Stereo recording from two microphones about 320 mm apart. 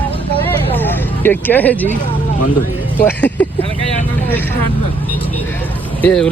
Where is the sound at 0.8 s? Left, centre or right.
Centre.